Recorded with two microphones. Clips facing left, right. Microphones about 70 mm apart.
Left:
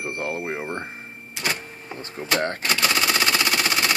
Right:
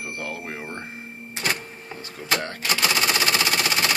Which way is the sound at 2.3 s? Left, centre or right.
Left.